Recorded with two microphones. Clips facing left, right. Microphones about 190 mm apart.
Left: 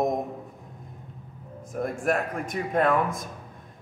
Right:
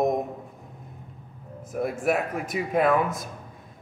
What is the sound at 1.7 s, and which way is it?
A man's voice, 5° right (ahead or behind).